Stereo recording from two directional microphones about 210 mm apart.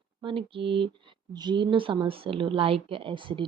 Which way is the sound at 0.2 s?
25° right (ahead or behind).